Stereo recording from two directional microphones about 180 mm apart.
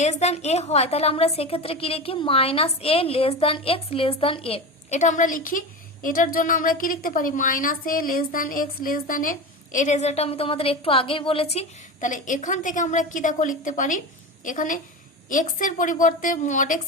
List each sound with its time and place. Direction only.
0.0 s a woman's voice: 40° left (ahead or behind)
11.5 s a woman's voice: 45° left (ahead or behind)